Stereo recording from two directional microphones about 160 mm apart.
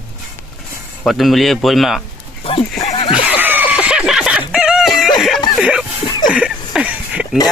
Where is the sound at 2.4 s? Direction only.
35° left (ahead or behind).